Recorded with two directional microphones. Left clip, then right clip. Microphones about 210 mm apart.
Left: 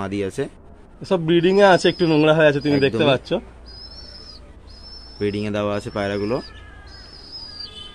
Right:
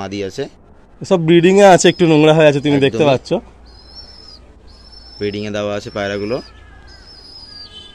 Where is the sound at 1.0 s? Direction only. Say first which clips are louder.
Right 6 dB; 45° right (ahead or behind).